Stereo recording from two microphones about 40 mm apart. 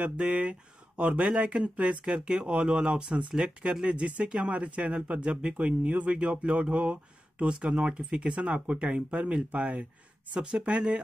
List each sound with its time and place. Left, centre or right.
0.0 s speech: right